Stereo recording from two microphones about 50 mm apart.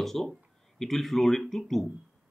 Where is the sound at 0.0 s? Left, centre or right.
Centre.